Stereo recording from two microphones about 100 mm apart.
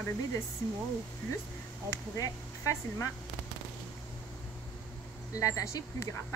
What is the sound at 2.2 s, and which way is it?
Speech, 30° left (ahead or behind).